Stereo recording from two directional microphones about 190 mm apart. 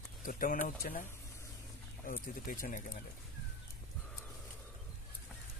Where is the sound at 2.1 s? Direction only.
45° left (ahead or behind).